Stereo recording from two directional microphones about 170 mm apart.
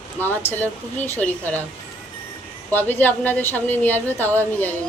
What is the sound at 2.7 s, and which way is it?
A woman's voice, 10° left (ahead or behind).